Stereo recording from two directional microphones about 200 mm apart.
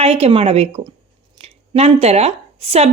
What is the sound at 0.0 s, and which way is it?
A woman's voice, 30° right (ahead or behind).